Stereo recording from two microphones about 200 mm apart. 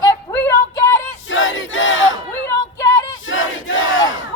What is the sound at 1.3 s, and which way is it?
Crowd, 75° left (ahead or behind).